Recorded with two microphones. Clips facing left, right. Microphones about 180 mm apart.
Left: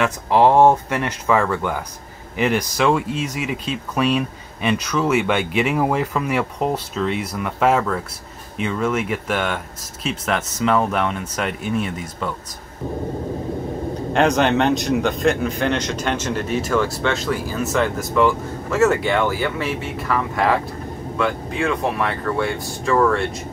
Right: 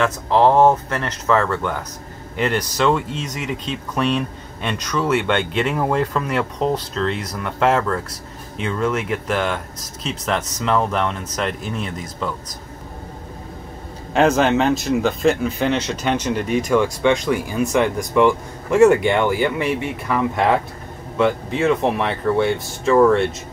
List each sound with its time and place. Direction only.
0.0 s speech: 15° left (ahead or behind)
14.1 s speech: 5° right (ahead or behind); by 23.2 s 20° right (ahead or behind)